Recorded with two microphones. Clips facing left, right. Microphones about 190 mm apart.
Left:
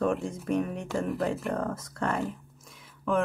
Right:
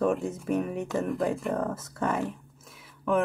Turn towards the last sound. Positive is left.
turn(degrees=-5)  # may be behind; listen again after turning